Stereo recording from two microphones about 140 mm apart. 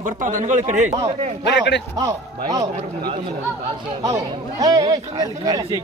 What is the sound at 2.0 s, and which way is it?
Speech, 25° right (ahead or behind).